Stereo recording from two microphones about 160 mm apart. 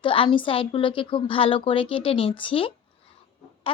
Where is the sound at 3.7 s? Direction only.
35° left (ahead or behind).